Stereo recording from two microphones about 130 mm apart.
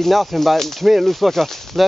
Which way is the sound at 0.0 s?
Centre (ahead or behind).